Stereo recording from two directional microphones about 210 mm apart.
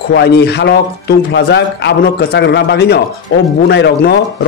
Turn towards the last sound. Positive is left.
turn(degrees=50)  # may be behind; listen again after turning